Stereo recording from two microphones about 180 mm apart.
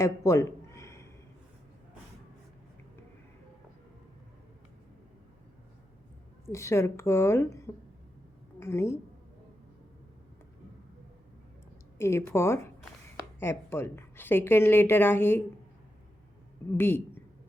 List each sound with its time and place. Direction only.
0.0 s a sound: 15° left (ahead or behind)
6.5 s a woman's voice: 15° left (ahead or behind)
11.9 s a woman's voice: 15° left (ahead or behind)
16.7 s a woman's voice: 10° left (ahead or behind)